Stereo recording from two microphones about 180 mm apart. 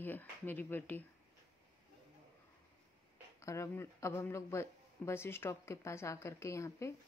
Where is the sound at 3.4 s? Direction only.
15° left (ahead or behind).